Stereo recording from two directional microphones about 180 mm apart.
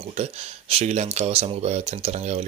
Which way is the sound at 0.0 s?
35° right (ahead or behind).